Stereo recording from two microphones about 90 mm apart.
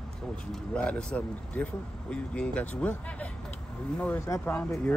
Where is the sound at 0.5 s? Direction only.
10° left (ahead or behind).